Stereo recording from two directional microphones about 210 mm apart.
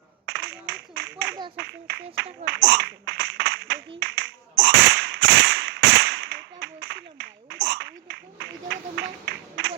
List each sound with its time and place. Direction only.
0.3 s clapping: 50° right (ahead or behind)
1.5 s speech: 55° right (ahead or behind)